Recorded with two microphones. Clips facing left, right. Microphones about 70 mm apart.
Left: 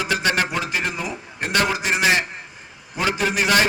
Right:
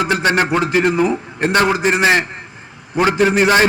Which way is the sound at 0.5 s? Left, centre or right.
Right.